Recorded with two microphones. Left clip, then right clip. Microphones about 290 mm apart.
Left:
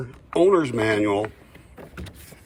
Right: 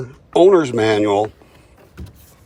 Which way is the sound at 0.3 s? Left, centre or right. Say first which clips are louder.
Right 7 dB; centre.